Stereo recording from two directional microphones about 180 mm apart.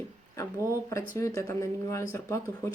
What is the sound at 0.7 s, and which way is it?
A woman's voice, 15° left (ahead or behind).